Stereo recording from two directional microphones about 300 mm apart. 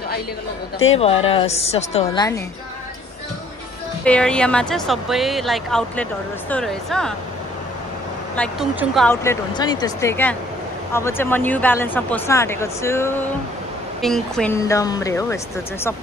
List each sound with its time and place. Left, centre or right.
0.9 s a woman's voice: centre
4.0 s speech: centre
8.4 s speech: centre